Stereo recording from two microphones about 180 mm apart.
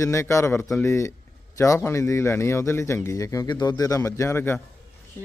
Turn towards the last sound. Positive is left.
turn(degrees=15)  # may be behind; listen again after turning